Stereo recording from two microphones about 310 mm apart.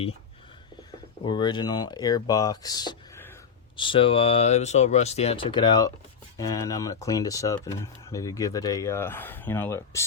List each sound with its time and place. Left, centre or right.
1.2 s speech: centre